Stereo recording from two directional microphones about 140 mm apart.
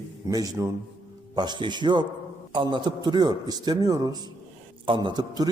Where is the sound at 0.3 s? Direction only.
25° right (ahead or behind).